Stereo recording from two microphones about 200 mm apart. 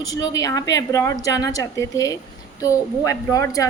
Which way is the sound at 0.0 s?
20° left (ahead or behind).